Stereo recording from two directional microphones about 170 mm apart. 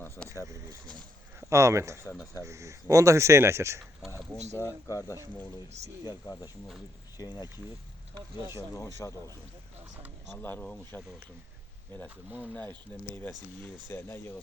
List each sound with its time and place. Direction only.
1.4 s speech: 15° right (ahead or behind)
2.0 s speech: 20° left (ahead or behind)
2.4 s speech: 15° right (ahead or behind)
4.5 s speech: 20° left (ahead or behind)
8.4 s speech: 15° right (ahead or behind)
9.0 s speech: 20° left (ahead or behind)
10.3 s speech: 10° left (ahead or behind)
12.4 s speech: 10° left (ahead or behind)